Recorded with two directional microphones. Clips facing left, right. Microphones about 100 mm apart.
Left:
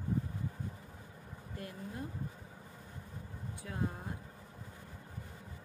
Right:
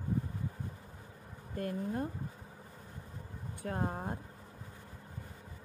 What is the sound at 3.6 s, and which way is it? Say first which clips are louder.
Speech: right 4 dB; 50° right (ahead or behind).